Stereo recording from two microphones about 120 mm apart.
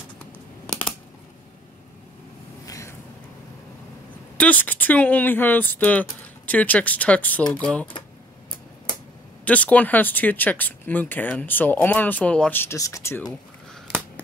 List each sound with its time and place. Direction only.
0.7 s computer keyboard: 5° left (ahead or behind)
2.6 s a sound: 30° left (ahead or behind)
4.4 s speech: 15° left (ahead or behind)
9.4 s speech: 10° left (ahead or behind)